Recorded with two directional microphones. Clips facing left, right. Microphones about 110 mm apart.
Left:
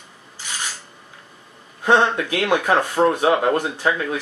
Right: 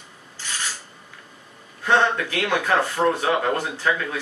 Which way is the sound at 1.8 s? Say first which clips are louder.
Left 3 dB; 15° left (ahead or behind).